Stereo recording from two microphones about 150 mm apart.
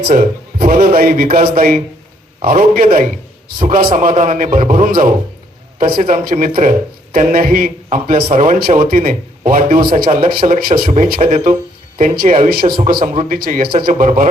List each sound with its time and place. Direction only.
0.0 s speech: 80° right
3.9 s speech: 60° right (ahead or behind)
11.2 s speech: 45° right (ahead or behind)
12.2 s speech: 70° right (ahead or behind)